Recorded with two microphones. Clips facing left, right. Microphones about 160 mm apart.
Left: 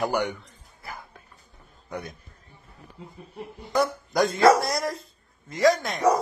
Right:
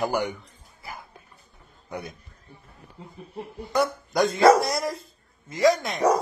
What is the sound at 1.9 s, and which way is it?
Speech, 10° right (ahead or behind).